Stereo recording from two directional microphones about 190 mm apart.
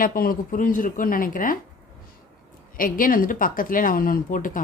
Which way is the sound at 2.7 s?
50° left (ahead or behind).